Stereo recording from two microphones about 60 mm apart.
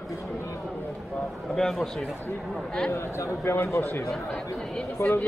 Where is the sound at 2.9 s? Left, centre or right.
Left.